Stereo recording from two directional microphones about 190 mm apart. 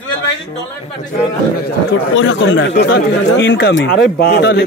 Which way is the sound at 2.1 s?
75° left (ahead or behind).